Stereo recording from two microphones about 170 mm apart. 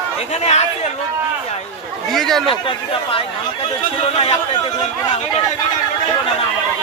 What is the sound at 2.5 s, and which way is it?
Speech, 30° left (ahead or behind).